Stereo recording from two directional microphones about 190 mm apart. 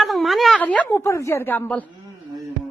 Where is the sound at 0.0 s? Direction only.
Centre (ahead or behind).